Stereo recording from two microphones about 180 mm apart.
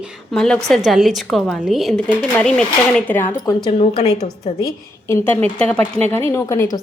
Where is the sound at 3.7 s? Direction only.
35° left (ahead or behind).